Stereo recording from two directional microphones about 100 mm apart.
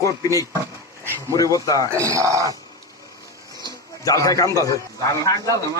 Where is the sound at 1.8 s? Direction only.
30° right (ahead or behind).